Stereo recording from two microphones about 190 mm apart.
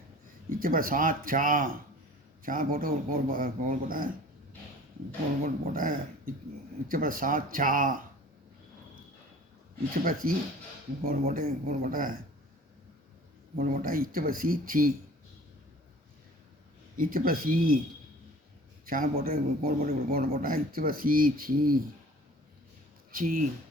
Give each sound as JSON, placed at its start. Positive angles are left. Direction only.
{"t": 0.6, "sound": "speech", "side_deg": -45}
{"t": 5.7, "sound": "speech", "side_deg": -45}
{"t": 9.9, "sound": "speech", "side_deg": -45}
{"t": 13.6, "sound": "speech", "side_deg": -50}
{"t": 17.0, "sound": "speech", "side_deg": -50}
{"t": 18.9, "sound": "speech", "side_deg": -50}
{"t": 23.1, "sound": "speech", "side_deg": -45}